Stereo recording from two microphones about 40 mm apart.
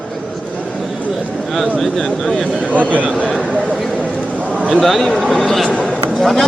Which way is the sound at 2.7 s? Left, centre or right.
Right.